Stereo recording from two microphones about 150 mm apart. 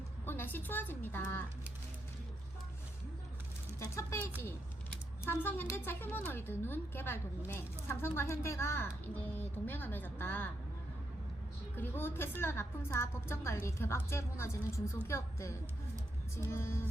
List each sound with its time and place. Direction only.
0.3 s a woman's voice: 15° left (ahead or behind)
3.8 s a woman's voice: 20° left (ahead or behind)
11.8 s a woman's voice: 15° left (ahead or behind)